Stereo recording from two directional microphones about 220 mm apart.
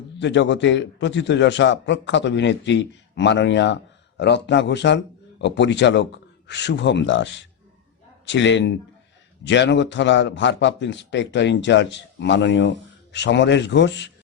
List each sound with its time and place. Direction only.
0.2 s a man's voice: 55° left (ahead or behind)